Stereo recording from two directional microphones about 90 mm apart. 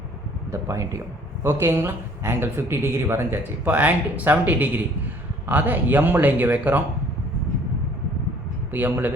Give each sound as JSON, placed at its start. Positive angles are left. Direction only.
{"t": 0.7, "sound": "speech", "side_deg": -35}
{"t": 8.7, "sound": "speech", "side_deg": -20}